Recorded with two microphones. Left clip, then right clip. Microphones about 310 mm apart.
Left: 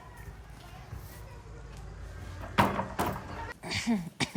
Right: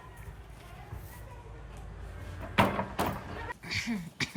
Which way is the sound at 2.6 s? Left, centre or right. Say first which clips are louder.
Even; centre.